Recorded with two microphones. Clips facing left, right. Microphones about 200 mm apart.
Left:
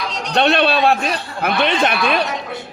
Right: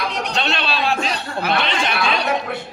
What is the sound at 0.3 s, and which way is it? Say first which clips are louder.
A man's voice: left 11 dB; 55° left (ahead or behind).